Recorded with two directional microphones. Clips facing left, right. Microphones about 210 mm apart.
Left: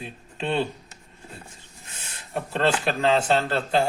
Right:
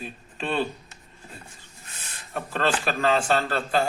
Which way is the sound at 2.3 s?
25° left (ahead or behind).